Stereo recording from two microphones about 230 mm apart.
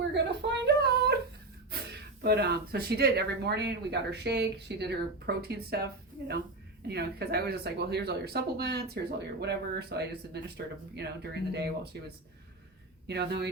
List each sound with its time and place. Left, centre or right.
0.1 s a sound: right
1.9 s speech: right
13.1 s speech: right